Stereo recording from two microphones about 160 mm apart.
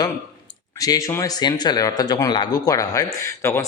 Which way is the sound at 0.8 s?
20° left (ahead or behind).